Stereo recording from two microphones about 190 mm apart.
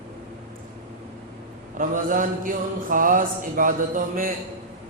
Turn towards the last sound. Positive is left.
turn(degrees=-45)  # may be behind; listen again after turning